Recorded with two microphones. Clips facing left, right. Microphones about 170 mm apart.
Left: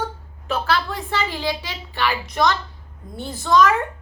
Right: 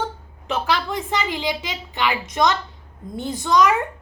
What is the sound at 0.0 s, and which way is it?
A woman's voice, 20° right (ahead or behind).